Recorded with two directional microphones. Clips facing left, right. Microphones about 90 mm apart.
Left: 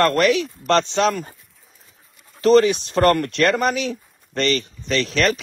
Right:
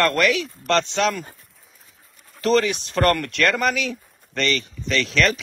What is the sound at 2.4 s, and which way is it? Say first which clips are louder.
Speech: left 5 dB; 30° left (ahead or behind).